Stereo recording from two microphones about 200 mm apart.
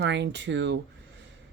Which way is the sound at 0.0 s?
60° right (ahead or behind).